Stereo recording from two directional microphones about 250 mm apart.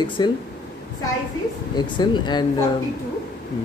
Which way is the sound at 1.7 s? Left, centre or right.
Centre.